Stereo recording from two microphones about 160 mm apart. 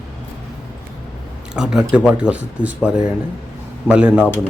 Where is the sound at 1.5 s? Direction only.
5° right (ahead or behind).